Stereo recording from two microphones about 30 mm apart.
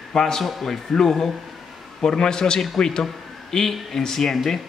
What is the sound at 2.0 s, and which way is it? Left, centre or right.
Speech, left.